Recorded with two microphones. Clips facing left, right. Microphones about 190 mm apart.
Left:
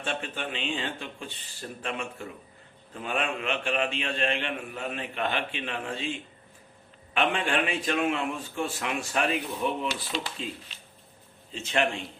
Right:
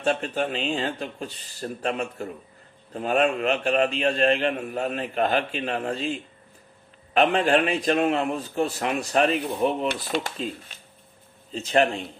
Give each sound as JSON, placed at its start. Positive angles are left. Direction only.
{"t": 0.0, "sound": "a man's voice", "side_deg": -40}
{"t": 9.9, "sound": "a man's voice", "side_deg": -50}